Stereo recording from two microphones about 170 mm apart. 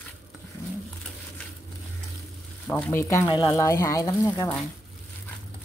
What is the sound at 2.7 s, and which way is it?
Speech, 10° left (ahead or behind).